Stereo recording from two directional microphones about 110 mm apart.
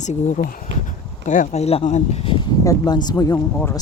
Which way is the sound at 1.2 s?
85° left.